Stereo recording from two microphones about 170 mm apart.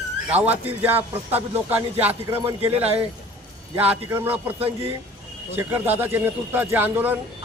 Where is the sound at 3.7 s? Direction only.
10° right (ahead or behind).